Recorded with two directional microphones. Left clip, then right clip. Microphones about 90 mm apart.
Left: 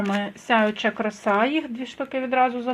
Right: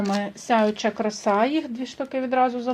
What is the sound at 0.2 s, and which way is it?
A woman's voice, 10° right (ahead or behind).